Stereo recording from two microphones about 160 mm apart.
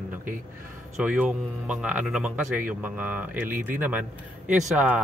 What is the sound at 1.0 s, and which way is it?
Speech, 10° right (ahead or behind).